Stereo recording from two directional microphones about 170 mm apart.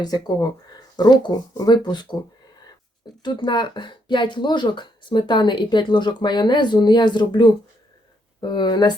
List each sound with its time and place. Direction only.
0.0 s speech: 20° left (ahead or behind)
3.2 s speech: 25° left (ahead or behind)